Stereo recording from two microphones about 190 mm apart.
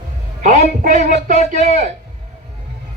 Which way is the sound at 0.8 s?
40° right (ahead or behind).